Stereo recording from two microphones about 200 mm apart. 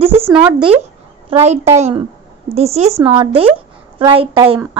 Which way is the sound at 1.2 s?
30° right (ahead or behind).